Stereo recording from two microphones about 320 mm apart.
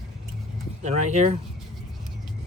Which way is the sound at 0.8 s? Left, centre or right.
Right.